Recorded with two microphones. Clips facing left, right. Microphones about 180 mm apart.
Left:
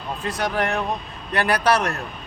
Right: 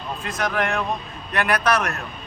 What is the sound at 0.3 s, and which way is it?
Speech, 35° left (ahead or behind).